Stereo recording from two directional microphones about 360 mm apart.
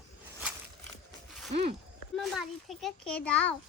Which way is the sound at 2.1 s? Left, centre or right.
Centre.